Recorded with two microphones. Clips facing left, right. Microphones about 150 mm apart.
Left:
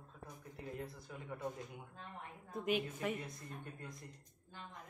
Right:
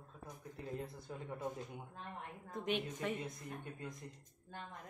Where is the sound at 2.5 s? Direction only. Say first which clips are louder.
Left 2 dB; 5° left (ahead or behind).